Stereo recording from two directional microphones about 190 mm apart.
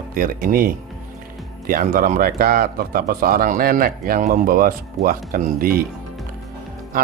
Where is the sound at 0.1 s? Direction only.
50° right (ahead or behind).